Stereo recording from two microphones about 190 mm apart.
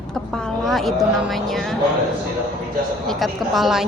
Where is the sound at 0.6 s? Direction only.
Centre (ahead or behind).